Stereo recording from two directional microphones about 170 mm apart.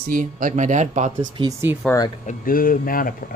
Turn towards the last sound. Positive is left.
turn(degrees=55)  # may be behind; listen again after turning